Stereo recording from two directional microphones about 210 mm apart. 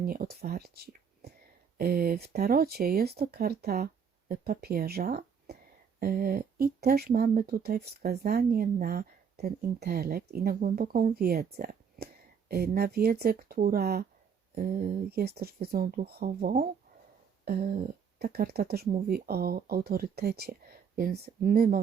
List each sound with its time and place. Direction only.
0.0 s speech: 45° right (ahead or behind)